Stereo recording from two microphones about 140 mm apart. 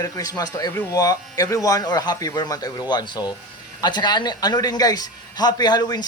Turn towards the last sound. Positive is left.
turn(degrees=30)  # may be behind; listen again after turning